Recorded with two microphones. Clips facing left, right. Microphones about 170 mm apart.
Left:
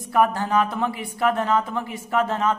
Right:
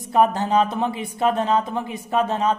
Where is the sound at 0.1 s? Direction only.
20° right (ahead or behind).